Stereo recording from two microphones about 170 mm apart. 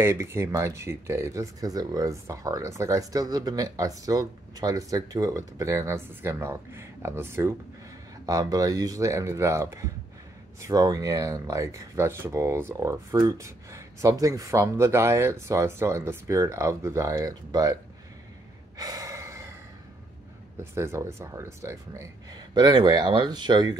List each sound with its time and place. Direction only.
0.0 s speech: 15° right (ahead or behind)
18.8 s gasp: 20° right (ahead or behind)
20.5 s speech: 15° right (ahead or behind)